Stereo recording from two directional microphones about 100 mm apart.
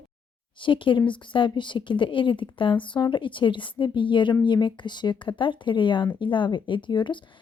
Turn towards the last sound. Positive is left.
turn(degrees=50)  # may be behind; listen again after turning